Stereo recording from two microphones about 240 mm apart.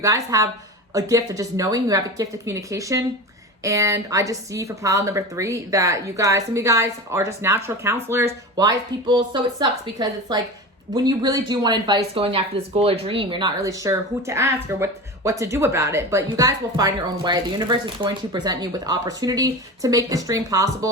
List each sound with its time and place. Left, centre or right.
0.0 s a woman's voice: centre